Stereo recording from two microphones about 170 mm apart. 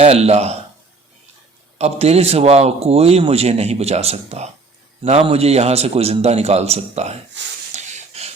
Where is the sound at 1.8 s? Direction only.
40° right (ahead or behind).